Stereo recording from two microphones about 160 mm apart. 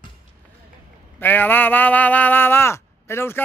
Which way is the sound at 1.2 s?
10° left (ahead or behind).